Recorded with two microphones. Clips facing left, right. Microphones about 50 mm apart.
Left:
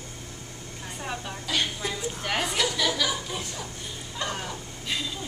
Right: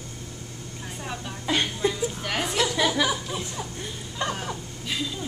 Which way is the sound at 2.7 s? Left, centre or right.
Right.